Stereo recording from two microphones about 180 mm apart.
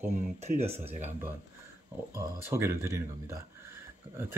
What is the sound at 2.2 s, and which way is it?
Speech, 15° right (ahead or behind).